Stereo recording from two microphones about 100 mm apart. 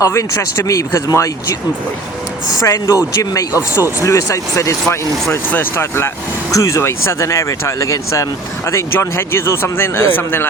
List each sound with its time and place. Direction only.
0.0 s speech: 30° left (ahead or behind)
2.6 s speech: 35° left (ahead or behind)
5.3 s speech: 20° left (ahead or behind)